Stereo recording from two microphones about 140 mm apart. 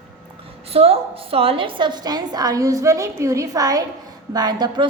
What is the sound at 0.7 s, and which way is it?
A woman's voice, 45° right (ahead or behind).